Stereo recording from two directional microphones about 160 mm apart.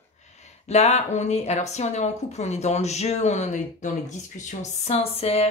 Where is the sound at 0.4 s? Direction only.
45° left (ahead or behind).